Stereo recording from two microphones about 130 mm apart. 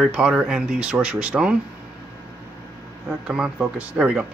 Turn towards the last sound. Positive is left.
turn(degrees=-10)  # may be behind; listen again after turning